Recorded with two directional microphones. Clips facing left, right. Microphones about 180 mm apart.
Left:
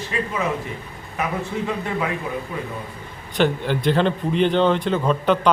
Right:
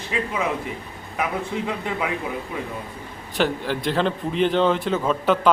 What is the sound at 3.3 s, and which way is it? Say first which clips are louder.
A man's voice: left 3 dB; centre (ahead or behind).